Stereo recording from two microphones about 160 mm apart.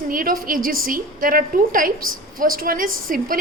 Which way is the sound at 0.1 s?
60° right (ahead or behind).